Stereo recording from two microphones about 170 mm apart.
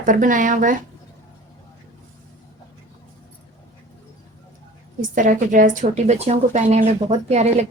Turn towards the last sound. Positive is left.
turn(degrees=-40)  # may be behind; listen again after turning